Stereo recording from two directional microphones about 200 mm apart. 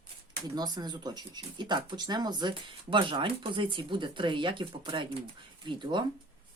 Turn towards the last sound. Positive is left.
turn(degrees=-25)  # may be behind; listen again after turning